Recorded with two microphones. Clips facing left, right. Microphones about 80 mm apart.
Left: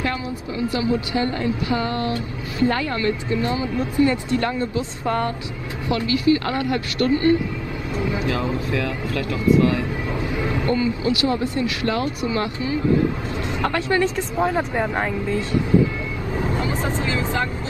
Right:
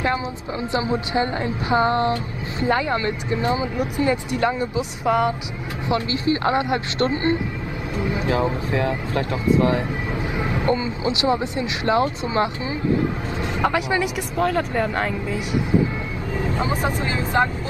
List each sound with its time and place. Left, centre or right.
0.7 s speech: right
5.9 s speech: right
13.6 s speech: centre
14.3 s speech: centre
16.8 s speech: centre